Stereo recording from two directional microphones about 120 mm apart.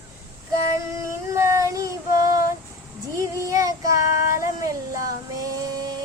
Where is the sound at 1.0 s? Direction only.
25° right (ahead or behind).